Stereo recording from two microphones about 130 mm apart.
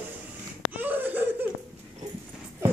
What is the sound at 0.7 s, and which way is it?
Laughter, 15° right (ahead or behind).